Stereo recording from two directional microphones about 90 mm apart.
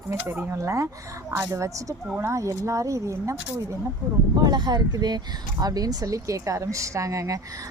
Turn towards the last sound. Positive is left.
turn(degrees=-35)  # may be behind; listen again after turning